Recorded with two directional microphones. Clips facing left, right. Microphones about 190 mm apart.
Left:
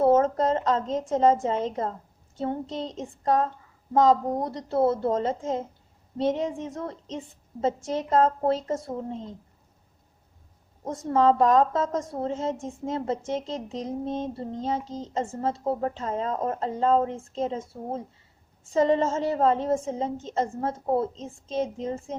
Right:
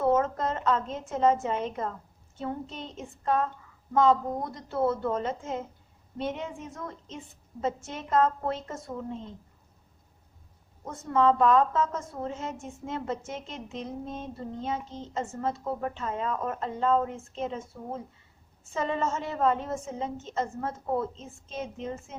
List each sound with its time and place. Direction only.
0.0 s a woman's voice: 30° left (ahead or behind)
10.8 s a woman's voice: 35° left (ahead or behind)